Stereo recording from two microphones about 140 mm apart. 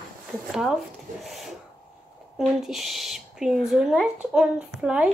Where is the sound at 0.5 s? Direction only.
5° right (ahead or behind).